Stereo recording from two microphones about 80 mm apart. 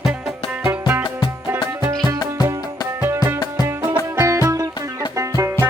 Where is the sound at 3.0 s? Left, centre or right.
Right.